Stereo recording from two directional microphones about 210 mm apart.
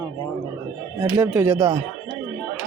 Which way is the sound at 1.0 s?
10° right (ahead or behind).